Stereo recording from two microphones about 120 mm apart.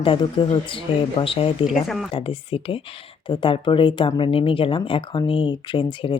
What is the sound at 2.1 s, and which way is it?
A woman's voice, 50° left (ahead or behind).